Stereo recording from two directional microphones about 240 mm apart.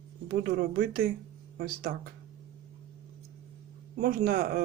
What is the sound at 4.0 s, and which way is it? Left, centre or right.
Speech, right.